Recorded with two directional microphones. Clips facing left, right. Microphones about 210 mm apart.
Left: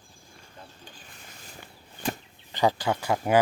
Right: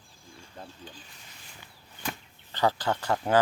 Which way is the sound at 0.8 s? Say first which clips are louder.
Right 2 dB; 45° left (ahead or behind).